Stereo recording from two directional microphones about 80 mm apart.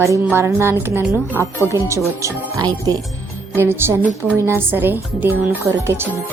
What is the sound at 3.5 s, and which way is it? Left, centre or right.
Speech, right.